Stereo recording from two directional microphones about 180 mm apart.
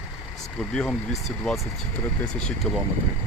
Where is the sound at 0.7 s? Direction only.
5° left (ahead or behind).